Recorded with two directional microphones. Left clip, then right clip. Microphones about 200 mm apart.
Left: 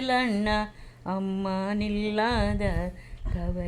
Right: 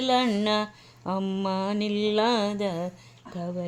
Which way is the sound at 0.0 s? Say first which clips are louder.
Right 2 dB; 35° right (ahead or behind).